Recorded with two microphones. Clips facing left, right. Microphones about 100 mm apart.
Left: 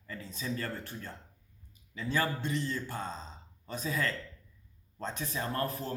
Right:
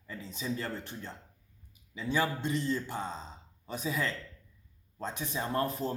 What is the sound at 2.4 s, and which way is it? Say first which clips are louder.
A man's voice: right 2 dB; 25° right (ahead or behind).